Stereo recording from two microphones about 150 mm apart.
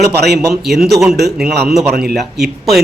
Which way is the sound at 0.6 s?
Centre (ahead or behind).